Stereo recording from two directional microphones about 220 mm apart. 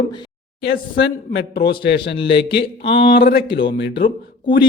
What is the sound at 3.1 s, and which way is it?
Speech, 45° left (ahead or behind).